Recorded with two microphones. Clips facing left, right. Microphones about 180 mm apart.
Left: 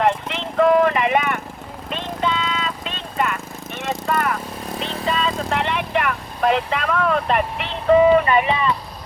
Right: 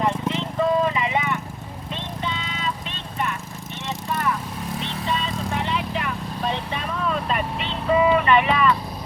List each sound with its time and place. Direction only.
0.0 s clip-clop: 80° left
1.9 s vehicle: 90° left
4.0 s vehicle: 70° left (ahead or behind)
4.8 s vehicle: 90° left; by 7.4 s 60° left (ahead or behind)
7.9 s vehicle: 40° left (ahead or behind)
8.2 s boat: 35° left (ahead or behind)